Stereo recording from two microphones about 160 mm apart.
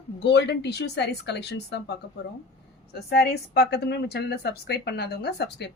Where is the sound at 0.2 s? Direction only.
90° left.